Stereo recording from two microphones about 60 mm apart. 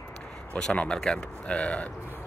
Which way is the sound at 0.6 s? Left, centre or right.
Centre.